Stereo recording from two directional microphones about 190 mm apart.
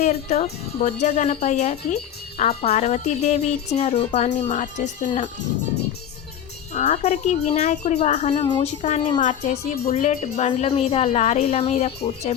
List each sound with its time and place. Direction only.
0.0 s a woman's voice: 40° left (ahead or behind)
6.7 s a woman's voice: 35° left (ahead or behind)
8.4 s speech: 25° left (ahead or behind)
8.8 s a woman's voice: 40° left (ahead or behind)